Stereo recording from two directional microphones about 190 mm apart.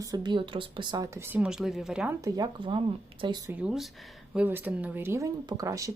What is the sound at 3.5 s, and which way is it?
Speech, 5° right (ahead or behind).